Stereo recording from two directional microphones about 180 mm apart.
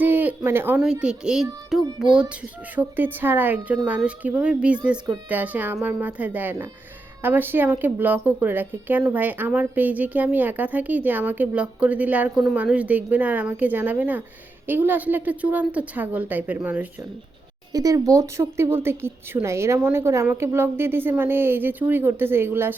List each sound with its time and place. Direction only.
0.0 s speech: 10° right (ahead or behind)
1.7 s music: centre (ahead or behind)
2.7 s a woman's voice: 10° right (ahead or behind)
17.7 s a woman's voice: 20° right (ahead or behind)